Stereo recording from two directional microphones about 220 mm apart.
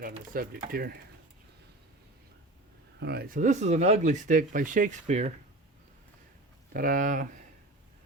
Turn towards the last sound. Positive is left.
turn(degrees=-35)  # may be behind; listen again after turning